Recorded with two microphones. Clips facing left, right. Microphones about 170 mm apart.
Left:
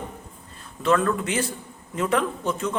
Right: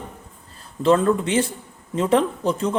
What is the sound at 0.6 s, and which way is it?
A man's voice, 30° right (ahead or behind).